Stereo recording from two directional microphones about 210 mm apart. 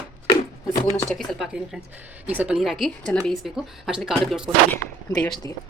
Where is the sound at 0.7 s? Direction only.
15° left (ahead or behind).